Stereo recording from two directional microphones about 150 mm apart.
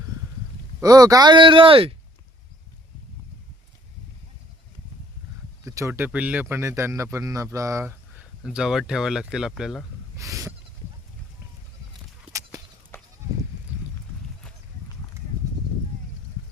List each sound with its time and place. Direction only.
0.8 s speech: 25° right (ahead or behind)
5.6 s speech: 20° right (ahead or behind)
8.4 s speech: 5° right (ahead or behind)
10.2 s a sound: 20° right (ahead or behind)
12.3 s horse: 20° right (ahead or behind)
12.9 s goat: 15° left (ahead or behind)